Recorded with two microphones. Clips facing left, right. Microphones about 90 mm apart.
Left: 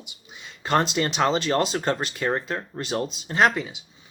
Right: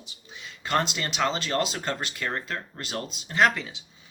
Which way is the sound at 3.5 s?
15° left (ahead or behind).